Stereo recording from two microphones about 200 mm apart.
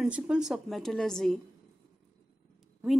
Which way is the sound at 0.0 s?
5° right (ahead or behind).